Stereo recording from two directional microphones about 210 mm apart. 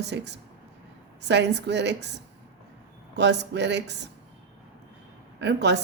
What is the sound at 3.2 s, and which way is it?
Speech, 55° right (ahead or behind).